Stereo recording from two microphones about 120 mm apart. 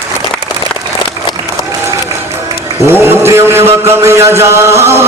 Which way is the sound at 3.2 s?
20° right (ahead or behind).